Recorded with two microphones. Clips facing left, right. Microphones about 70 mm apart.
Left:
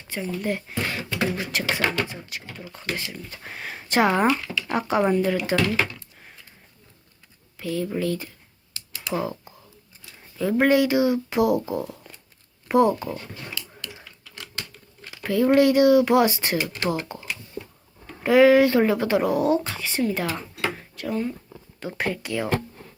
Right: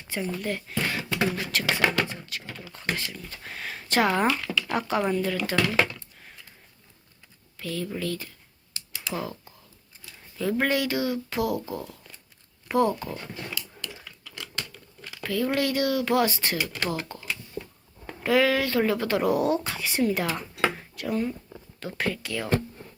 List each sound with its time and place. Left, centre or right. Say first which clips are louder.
0.4 s speech: left 2 dB; centre
5.5 s speech: left 1 dB; centre
6.1 s sniff: left 1 dB; centre
7.6 s speech: left 5 dB; centre
15.2 s speech: left 8 dB; centre
20.3 s a sound: right 2 dB; centre
21.8 s speech: left 2 dB; centre